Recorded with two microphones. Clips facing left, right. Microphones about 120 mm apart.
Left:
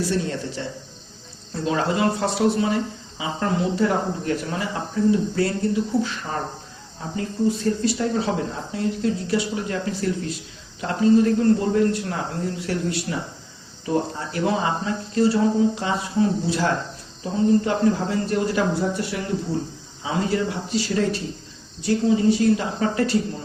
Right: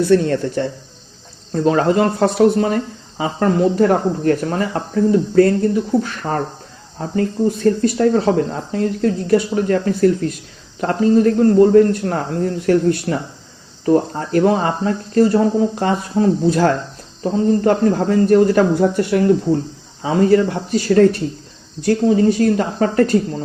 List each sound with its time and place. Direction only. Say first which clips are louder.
0.0 s speech: right 10 dB; 55° right (ahead or behind)